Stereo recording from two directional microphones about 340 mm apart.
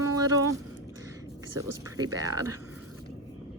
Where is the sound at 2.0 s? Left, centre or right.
Centre.